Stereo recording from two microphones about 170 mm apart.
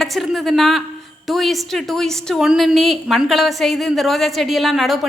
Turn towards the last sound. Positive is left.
turn(degrees=0)  # may be behind; listen again after turning